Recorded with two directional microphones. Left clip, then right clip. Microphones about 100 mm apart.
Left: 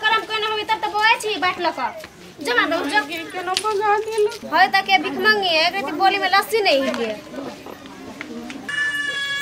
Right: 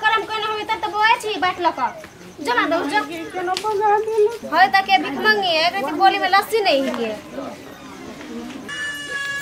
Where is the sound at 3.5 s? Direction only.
35° left (ahead or behind).